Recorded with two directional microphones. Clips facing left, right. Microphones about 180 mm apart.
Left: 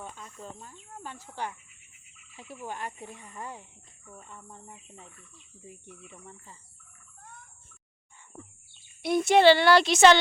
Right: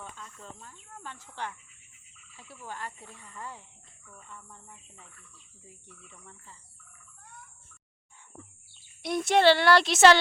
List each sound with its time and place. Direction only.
0.0 s speech: 15° left (ahead or behind)
2.3 s speech: 15° left (ahead or behind)
9.0 s speech: centre (ahead or behind)